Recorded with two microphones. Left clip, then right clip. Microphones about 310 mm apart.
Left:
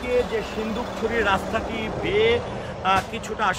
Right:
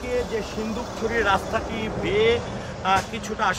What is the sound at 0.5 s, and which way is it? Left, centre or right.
Speech, left.